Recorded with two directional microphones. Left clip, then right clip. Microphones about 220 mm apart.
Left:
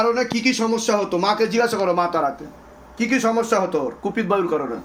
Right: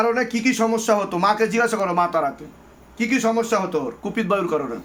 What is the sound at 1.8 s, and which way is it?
Speech, 20° right (ahead or behind).